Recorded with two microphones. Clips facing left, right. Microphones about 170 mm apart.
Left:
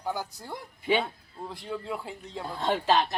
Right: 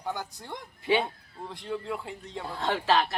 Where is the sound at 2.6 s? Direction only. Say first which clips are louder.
Left 1 dB; 15° left (ahead or behind).